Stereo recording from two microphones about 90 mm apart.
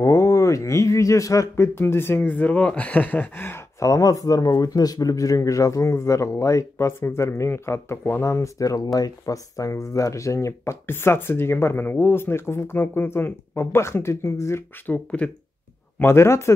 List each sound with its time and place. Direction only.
0.0 s speech: 35° left (ahead or behind)
1.8 s speech: 25° left (ahead or behind)
3.8 s speech: 40° left (ahead or behind)
14.9 s speech: 15° left (ahead or behind)
16.0 s speech: 30° left (ahead or behind)